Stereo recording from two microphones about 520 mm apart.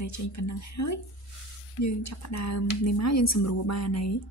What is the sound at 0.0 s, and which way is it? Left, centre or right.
Speech, left.